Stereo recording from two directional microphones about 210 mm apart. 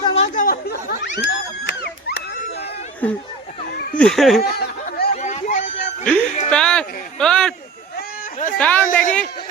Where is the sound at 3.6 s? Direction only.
50° left (ahead or behind).